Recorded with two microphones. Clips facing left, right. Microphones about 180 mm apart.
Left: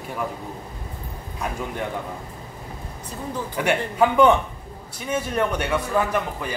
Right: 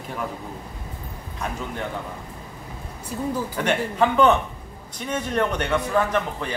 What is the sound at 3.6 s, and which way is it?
A man's voice, 10° left (ahead or behind).